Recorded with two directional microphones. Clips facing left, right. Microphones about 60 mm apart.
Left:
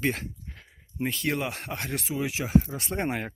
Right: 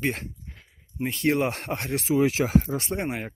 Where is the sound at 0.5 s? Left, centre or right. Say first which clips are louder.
Even; centre.